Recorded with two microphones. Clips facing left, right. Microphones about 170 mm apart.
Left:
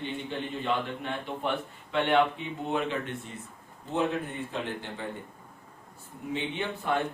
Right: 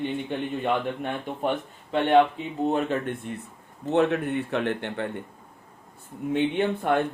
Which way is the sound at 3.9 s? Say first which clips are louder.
Right 7 dB; 70° right (ahead or behind).